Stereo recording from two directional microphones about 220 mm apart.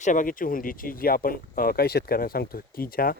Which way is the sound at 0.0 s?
35° left (ahead or behind).